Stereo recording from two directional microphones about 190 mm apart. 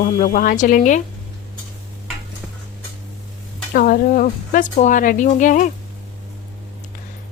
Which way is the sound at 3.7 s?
50° left (ahead or behind).